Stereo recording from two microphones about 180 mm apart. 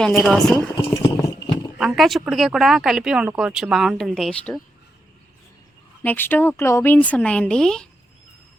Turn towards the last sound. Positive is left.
turn(degrees=5)  # may be behind; listen again after turning